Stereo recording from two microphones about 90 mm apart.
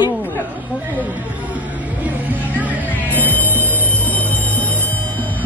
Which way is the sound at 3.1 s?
20° left (ahead or behind).